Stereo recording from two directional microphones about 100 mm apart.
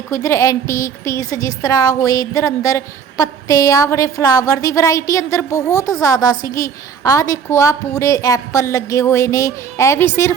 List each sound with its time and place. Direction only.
0.1 s a woman's voice: 30° left (ahead or behind)